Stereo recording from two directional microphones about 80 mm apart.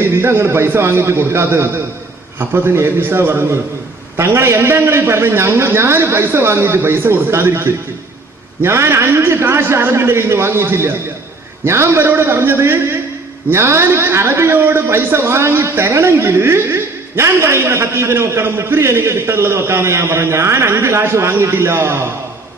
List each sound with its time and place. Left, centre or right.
0.0 s a man's voice: right